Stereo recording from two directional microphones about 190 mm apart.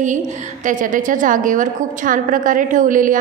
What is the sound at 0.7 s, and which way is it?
A woman's voice, 45° right (ahead or behind).